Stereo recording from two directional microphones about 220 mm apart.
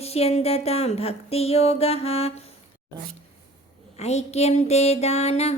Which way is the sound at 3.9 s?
30° left (ahead or behind).